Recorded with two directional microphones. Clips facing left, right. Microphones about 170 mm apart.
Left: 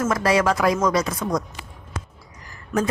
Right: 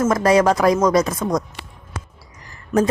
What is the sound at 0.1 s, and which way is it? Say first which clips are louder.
Speech: right 4 dB; 40° right (ahead or behind).